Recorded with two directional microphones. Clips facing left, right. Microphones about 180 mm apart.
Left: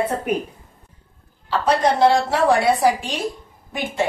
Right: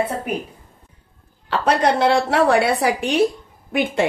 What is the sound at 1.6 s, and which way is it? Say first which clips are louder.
Speech: left 1 dB; 65° right (ahead or behind).